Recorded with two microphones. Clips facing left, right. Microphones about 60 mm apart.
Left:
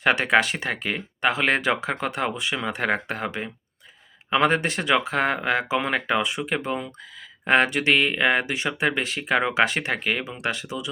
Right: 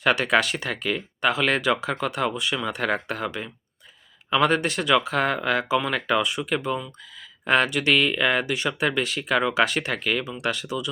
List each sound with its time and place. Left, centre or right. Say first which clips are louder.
0.0 s speech: left 1 dB; left